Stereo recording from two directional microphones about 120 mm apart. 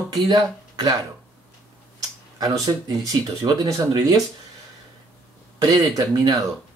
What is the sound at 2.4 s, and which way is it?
Speech, 30° right (ahead or behind).